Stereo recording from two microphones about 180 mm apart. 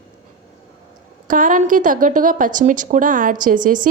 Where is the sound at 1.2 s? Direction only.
50° right (ahead or behind).